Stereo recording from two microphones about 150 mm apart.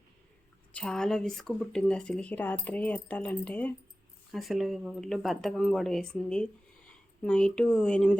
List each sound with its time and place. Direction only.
0.7 s speech: 5° left (ahead or behind)
4.3 s speech: centre (ahead or behind)